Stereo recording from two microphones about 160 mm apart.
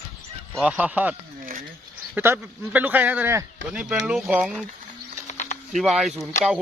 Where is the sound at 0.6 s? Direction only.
10° right (ahead or behind).